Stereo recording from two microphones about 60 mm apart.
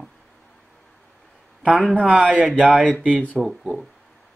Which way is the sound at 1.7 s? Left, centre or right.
Right.